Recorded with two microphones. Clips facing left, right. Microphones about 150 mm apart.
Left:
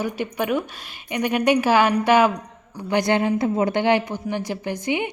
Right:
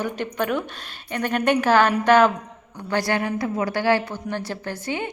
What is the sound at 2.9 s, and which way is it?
A woman's voice, 20° left (ahead or behind).